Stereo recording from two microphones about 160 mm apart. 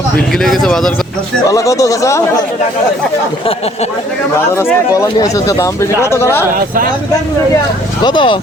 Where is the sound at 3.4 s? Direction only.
40° left (ahead or behind).